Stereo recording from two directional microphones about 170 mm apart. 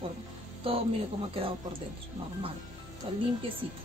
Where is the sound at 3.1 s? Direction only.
35° right (ahead or behind).